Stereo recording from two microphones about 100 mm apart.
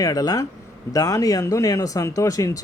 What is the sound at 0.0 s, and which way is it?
Speech, 35° left (ahead or behind).